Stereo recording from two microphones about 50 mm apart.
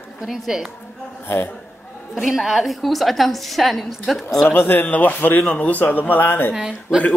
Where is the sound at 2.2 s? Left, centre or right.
Centre.